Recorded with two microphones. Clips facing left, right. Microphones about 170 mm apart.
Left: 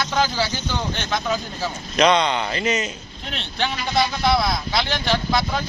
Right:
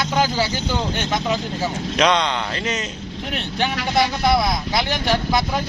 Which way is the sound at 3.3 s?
10° right (ahead or behind).